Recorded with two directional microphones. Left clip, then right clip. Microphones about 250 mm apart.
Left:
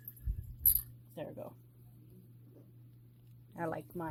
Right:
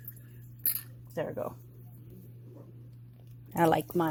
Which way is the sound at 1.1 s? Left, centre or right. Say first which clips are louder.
Right 10 dB; right.